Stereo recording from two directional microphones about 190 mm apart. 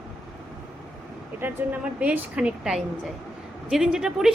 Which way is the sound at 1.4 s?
10° right (ahead or behind).